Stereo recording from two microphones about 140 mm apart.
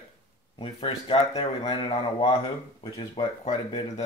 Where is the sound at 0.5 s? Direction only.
40° left (ahead or behind).